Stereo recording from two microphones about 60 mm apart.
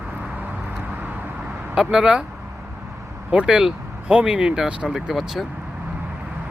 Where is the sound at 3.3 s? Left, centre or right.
Centre.